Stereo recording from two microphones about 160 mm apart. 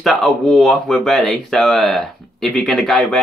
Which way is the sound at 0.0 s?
Centre (ahead or behind).